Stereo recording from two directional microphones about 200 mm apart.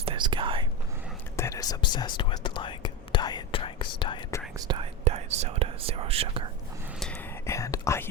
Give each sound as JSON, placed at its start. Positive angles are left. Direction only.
{"t": 0.0, "sound": "whispering", "side_deg": -25}
{"t": 1.4, "sound": "whispering", "side_deg": 15}
{"t": 4.5, "sound": "whispering", "side_deg": -25}
{"t": 7.0, "sound": "whispering", "side_deg": 10}